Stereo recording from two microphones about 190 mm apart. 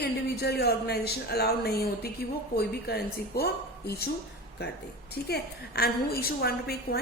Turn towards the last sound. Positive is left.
turn(degrees=55)  # may be behind; listen again after turning